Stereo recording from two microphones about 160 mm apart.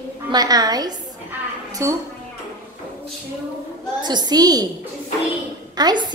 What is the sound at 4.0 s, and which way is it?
Speech, 25° right (ahead or behind).